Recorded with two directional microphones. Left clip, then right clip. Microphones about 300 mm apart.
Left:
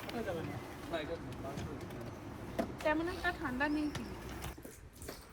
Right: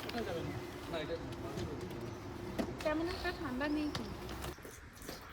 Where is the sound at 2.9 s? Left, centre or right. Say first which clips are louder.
Left 3 dB; left.